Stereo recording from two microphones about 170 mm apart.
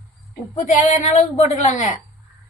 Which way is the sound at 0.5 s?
45° left (ahead or behind).